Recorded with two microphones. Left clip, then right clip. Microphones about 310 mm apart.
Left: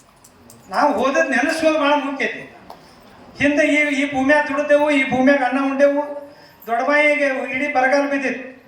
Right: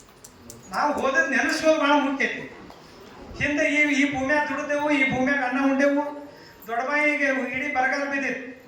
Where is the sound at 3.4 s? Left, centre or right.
Left.